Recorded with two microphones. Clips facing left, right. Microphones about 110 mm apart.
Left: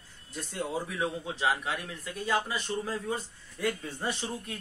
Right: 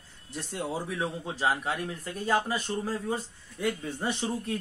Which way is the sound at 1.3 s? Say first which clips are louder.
Right 4 dB; 35° right (ahead or behind).